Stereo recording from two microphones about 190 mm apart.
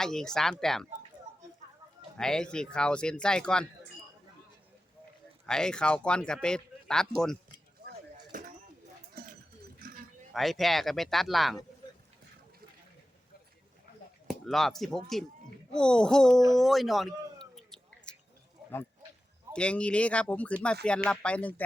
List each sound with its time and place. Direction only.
0.0 s speech: centre (ahead or behind)
2.1 s speech: 5° left (ahead or behind)
5.5 s speech: 5° left (ahead or behind)
8.3 s a sound: 45° right (ahead or behind)
9.7 s a sound: 50° right (ahead or behind)
10.3 s speech: centre (ahead or behind)
14.3 s speech: centre (ahead or behind)
17.5 s a sound: centre (ahead or behind)
19.5 s speech: 5° left (ahead or behind)